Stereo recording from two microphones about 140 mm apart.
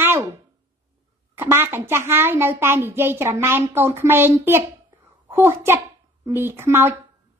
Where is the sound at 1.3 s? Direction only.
15° right (ahead or behind).